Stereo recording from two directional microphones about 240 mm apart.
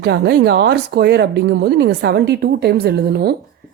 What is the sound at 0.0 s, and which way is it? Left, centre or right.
A woman's voice, right.